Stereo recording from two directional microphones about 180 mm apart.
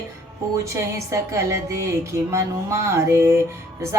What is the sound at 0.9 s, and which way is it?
Music, 15° right (ahead or behind).